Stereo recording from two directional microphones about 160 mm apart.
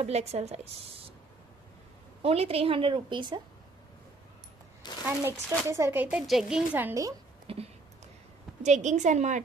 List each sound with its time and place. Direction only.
0.0 s a woman's voice: 40° right (ahead or behind)
2.2 s a woman's voice: 40° right (ahead or behind)
5.0 s speech: 10° right (ahead or behind)
7.5 s a woman's voice: 35° right (ahead or behind)
8.6 s a woman's voice: 50° right (ahead or behind)